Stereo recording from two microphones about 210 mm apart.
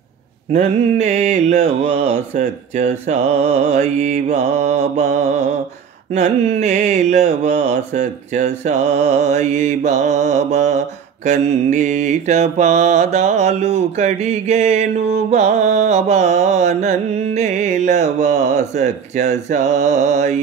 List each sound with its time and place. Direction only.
0.5 s mantra: 35° right (ahead or behind)